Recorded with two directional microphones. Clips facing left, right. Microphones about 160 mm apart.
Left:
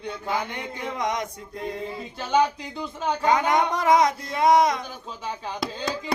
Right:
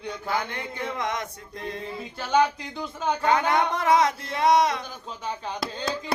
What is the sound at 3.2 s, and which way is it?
Speech, 15° left (ahead or behind).